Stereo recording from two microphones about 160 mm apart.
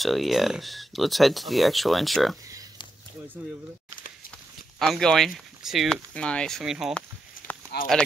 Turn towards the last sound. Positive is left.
turn(degrees=75)  # may be behind; listen again after turning